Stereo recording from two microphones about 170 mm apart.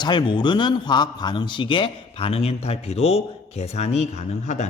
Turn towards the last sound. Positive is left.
turn(degrees=40)  # may be behind; listen again after turning